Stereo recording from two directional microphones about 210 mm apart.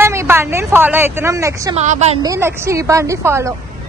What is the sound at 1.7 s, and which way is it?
Speech, 35° right (ahead or behind).